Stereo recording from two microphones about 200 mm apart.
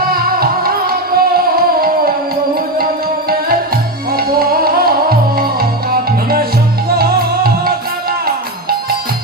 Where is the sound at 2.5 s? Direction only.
50° right (ahead or behind).